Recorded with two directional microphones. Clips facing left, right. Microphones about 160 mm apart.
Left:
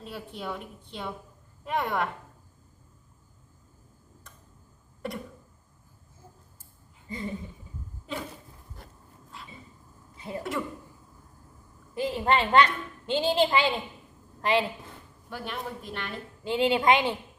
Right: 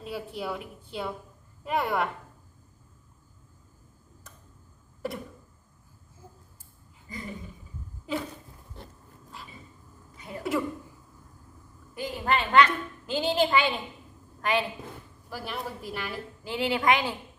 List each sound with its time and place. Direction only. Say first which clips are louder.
0.0 s a woman's voice: right 3 dB; 5° right (ahead or behind)
5.0 s a woman's voice: right 1 dB; centre (ahead or behind)
7.1 s a woman's voice: left 4 dB; 25° left (ahead or behind)
8.1 s a woman's voice: right 4 dB; centre (ahead or behind)
9.4 s a sound: even; centre (ahead or behind)
10.2 s a sound: left 4 dB; 30° left (ahead or behind)
11.9 s a woman's voice: left 3 dB; 25° left (ahead or behind)
15.3 s a woman's voice: even; 5° right (ahead or behind)
16.4 s a woman's voice: left 4 dB; 25° left (ahead or behind)